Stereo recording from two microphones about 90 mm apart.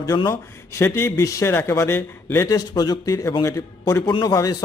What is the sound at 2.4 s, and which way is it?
A man's voice, 50° left (ahead or behind).